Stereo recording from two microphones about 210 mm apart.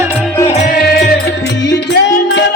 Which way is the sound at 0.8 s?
50° left (ahead or behind).